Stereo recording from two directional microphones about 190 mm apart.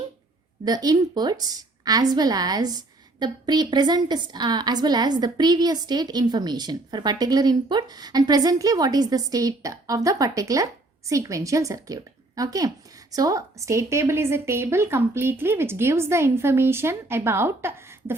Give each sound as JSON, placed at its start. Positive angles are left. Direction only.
{"t": 0.6, "sound": "a woman's voice", "side_deg": -20}